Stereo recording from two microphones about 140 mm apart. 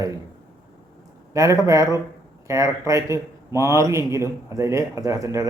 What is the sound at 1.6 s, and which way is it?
A man's voice, 20° right (ahead or behind).